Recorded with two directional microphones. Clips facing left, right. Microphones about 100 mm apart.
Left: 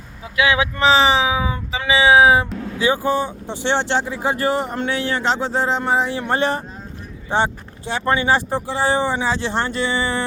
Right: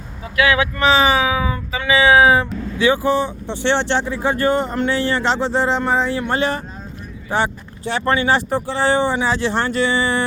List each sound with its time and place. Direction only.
0.3 s speech: 20° left (ahead or behind); by 5.8 s 5° left (ahead or behind)
5.8 s speech: 15° left (ahead or behind)
6.1 s speech: 35° left (ahead or behind)
7.3 s speech: 25° left (ahead or behind)